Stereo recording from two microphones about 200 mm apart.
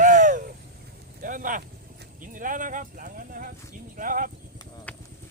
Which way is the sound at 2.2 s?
40° right (ahead or behind).